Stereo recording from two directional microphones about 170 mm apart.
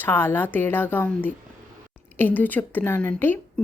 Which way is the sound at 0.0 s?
15° left (ahead or behind).